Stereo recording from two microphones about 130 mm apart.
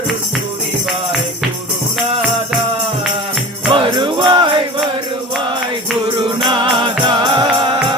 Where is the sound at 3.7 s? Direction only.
40° right (ahead or behind).